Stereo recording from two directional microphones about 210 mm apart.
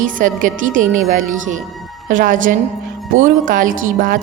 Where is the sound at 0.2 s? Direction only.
40° right (ahead or behind).